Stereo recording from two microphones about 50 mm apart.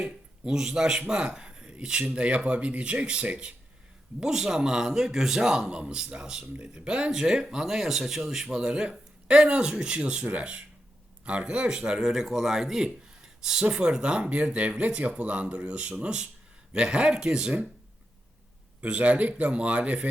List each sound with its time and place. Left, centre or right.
0.0 s speech: centre
4.2 s a man's voice: centre
7.1 s a man's voice: centre
18.8 s speech: right